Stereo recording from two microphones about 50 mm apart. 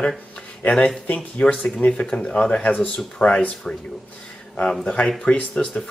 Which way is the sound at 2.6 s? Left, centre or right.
Left.